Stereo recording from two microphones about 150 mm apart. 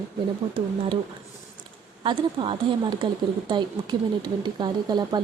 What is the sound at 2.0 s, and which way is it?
Speech, 35° right (ahead or behind).